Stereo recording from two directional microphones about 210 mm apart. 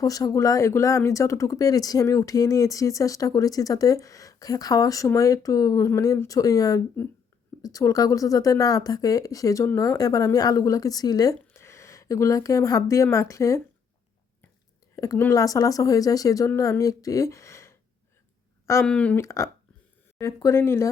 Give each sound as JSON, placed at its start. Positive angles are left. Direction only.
{"t": 0.0, "sound": "speech", "side_deg": 15}
{"t": 14.9, "sound": "speech", "side_deg": 15}